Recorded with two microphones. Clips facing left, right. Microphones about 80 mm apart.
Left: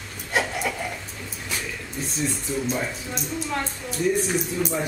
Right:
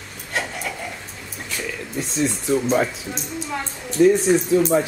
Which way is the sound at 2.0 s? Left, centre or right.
Right.